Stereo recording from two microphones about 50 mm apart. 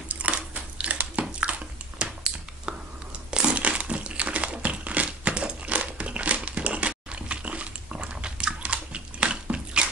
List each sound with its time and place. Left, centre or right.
0.1 s a sound: right
1.3 s biting: right
3.3 s crushing: right
6.9 s biting: right